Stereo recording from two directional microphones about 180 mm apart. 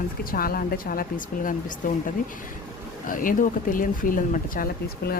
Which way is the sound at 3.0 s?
50° left (ahead or behind).